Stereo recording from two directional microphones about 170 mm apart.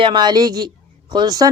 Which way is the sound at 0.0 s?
25° right (ahead or behind).